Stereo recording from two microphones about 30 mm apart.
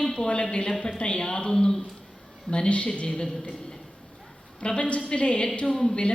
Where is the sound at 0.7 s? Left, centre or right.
Left.